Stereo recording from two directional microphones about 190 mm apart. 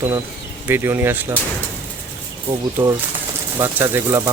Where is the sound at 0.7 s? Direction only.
10° right (ahead or behind).